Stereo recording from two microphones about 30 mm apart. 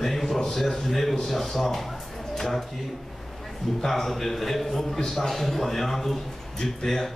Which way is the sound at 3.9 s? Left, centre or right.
Centre.